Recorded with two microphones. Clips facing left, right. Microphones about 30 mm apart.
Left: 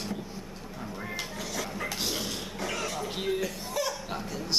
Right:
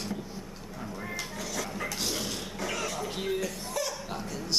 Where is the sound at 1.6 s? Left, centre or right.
Centre.